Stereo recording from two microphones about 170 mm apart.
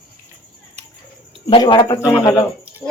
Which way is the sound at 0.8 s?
40° right (ahead or behind).